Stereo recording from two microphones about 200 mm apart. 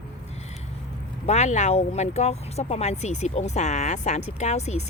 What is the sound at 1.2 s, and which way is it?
Speech, 35° left (ahead or behind).